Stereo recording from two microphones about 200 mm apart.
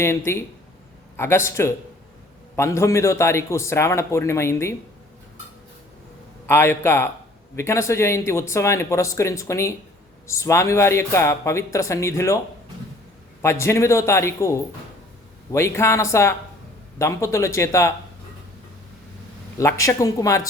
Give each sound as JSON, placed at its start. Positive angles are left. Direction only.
{"t": 1.1, "sound": "speech", "side_deg": 10}
{"t": 6.5, "sound": "speech", "side_deg": 10}
{"t": 13.4, "sound": "speech", "side_deg": 15}
{"t": 15.5, "sound": "speech", "side_deg": 15}
{"t": 19.5, "sound": "speech", "side_deg": 15}